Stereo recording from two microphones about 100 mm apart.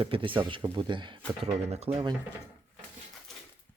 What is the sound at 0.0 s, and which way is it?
Speech, 60° right (ahead or behind).